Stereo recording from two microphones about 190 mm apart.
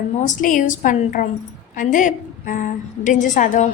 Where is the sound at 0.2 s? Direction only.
40° left (ahead or behind).